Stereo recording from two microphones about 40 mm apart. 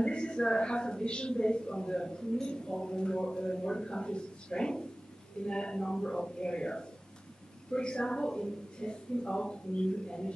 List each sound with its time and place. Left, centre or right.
0.0 s a woman's voice: left